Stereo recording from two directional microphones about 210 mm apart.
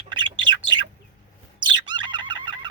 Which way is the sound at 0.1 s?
20° right (ahead or behind).